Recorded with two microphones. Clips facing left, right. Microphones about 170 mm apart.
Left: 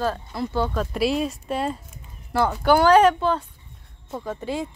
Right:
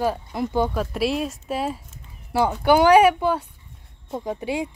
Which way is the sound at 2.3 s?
15° right (ahead or behind).